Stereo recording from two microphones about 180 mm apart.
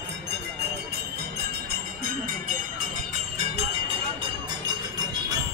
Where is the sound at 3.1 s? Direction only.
40° right (ahead or behind).